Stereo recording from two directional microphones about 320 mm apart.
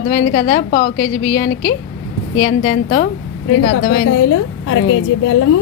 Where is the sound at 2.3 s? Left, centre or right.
Left.